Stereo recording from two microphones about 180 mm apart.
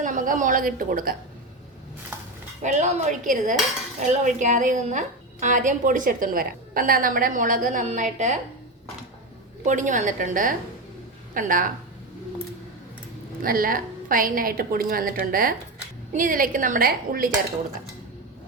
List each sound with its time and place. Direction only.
0.0 s a woman's voice: 45° right (ahead or behind)
2.6 s a woman's voice: 40° right (ahead or behind)
9.6 s a woman's voice: 45° right (ahead or behind)
13.4 s a woman's voice: 55° right (ahead or behind)